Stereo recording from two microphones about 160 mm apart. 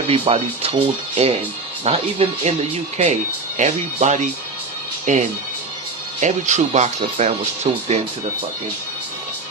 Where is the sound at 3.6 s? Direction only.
50° right (ahead or behind).